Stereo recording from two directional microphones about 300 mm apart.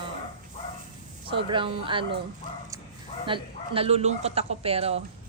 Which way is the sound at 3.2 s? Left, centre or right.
Centre.